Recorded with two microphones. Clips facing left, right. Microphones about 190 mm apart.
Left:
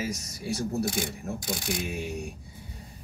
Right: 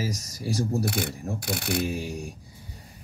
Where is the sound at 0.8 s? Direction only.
65° right (ahead or behind).